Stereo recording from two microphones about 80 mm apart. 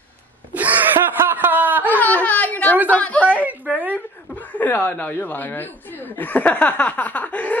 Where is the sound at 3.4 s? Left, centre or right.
Right.